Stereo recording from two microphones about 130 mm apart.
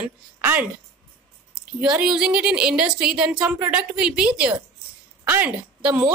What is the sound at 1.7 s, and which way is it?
A woman's voice, 10° right (ahead or behind).